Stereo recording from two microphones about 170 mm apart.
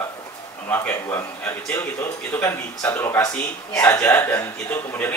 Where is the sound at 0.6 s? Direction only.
10° left (ahead or behind).